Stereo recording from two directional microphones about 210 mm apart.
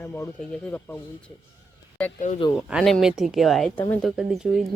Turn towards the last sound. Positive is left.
turn(degrees=0)  # may be behind; listen again after turning